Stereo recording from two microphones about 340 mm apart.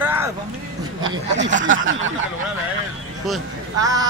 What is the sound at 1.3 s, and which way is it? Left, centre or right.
Speech, right.